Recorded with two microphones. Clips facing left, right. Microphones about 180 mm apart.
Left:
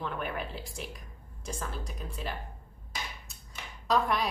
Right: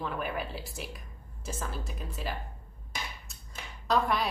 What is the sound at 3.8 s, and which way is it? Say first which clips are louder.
Speech: even; centre (ahead or behind).